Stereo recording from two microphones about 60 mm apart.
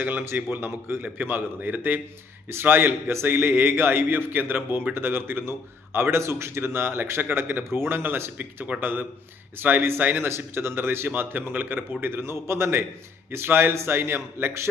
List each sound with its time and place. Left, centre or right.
0.0 s a man's voice: right
0.5 s a man's voice: right